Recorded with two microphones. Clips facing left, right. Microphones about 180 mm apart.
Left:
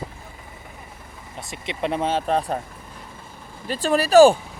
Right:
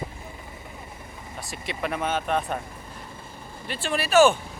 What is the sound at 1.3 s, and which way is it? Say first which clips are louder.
Speech: left 2 dB; 20° left (ahead or behind).